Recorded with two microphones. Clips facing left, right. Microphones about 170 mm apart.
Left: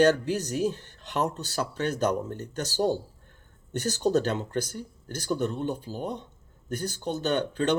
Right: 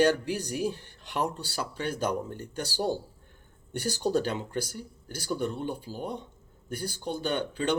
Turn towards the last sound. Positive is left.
turn(degrees=-10)  # may be behind; listen again after turning